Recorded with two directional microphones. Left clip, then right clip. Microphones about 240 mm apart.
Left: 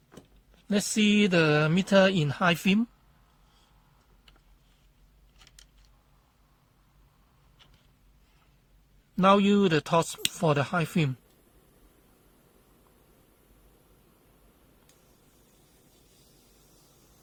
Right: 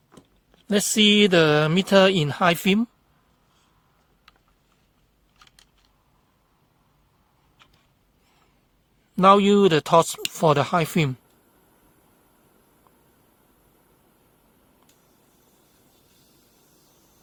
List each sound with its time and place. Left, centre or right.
0.7 s speech: right
9.1 s speech: right
15.6 s a sound: centre